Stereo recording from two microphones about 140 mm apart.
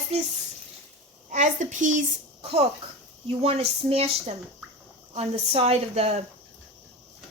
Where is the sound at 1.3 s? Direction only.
60° right (ahead or behind).